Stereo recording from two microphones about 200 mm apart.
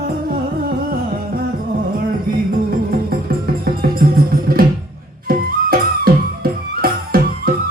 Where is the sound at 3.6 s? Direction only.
50° right (ahead or behind).